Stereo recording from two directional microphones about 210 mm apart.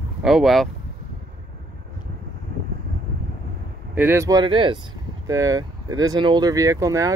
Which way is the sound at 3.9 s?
10° right (ahead or behind).